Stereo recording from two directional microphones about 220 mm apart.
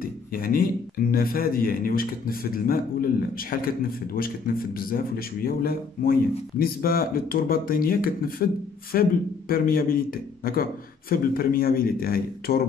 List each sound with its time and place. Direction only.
0.0 s a man's voice: 40° left (ahead or behind)